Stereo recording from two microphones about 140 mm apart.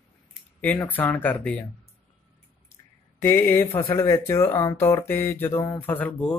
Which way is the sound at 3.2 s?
15° left (ahead or behind).